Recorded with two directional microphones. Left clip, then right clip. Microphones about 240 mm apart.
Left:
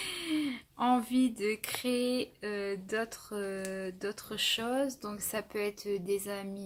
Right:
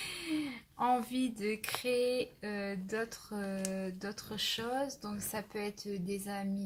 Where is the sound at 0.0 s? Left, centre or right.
Left.